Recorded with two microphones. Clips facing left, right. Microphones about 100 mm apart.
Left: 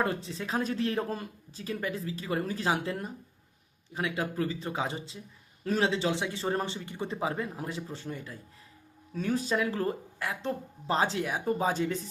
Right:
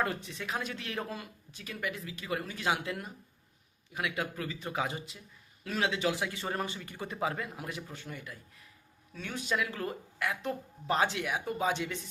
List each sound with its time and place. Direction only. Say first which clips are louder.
0.0 s speech: left 3 dB; 30° left (ahead or behind)